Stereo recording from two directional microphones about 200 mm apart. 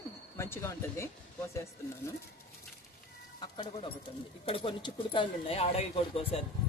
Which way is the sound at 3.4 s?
25° left (ahead or behind).